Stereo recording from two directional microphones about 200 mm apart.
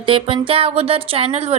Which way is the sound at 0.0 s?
25° right (ahead or behind).